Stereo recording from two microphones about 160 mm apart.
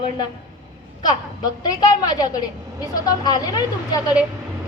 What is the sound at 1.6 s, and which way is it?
A woman's voice, 25° left (ahead or behind).